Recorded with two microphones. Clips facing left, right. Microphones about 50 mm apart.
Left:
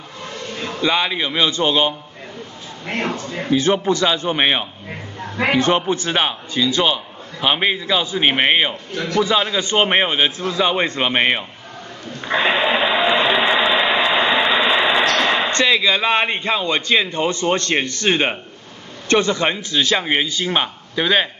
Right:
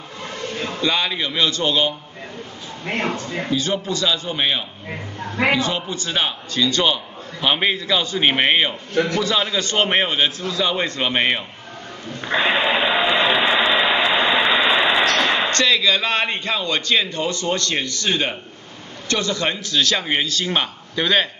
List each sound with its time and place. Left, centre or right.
0.7 s a man's voice: centre
3.5 s a man's voice: left; by 8.7 s centre
8.9 s a man's voice: right
9.2 s a man's voice: centre
12.5 s a sound: centre; by 18.4 s left
19.0 s a man's voice: left; by 21.3 s centre